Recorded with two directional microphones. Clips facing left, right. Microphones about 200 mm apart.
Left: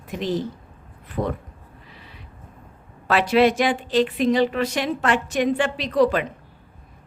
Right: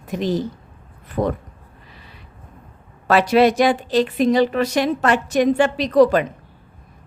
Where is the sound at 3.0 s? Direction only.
40° right (ahead or behind).